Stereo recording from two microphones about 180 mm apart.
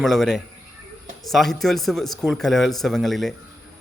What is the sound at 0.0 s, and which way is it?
Speech, centre (ahead or behind).